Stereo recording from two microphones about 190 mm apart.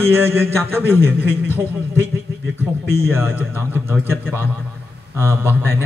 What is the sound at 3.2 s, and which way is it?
Speech, 10° right (ahead or behind).